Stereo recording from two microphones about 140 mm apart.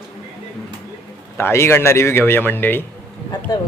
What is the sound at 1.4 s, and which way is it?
A man's voice, 20° left (ahead or behind).